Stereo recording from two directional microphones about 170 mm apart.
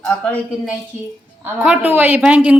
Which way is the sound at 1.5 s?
10° right (ahead or behind).